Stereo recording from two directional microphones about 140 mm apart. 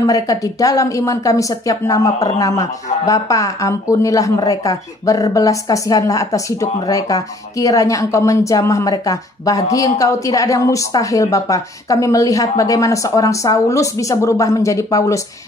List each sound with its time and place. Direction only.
0.0 s speech: 25° left (ahead or behind)